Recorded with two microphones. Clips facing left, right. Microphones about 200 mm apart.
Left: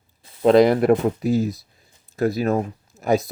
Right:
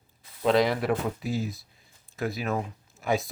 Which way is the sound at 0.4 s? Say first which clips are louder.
Left 9 dB; 45° left (ahead or behind).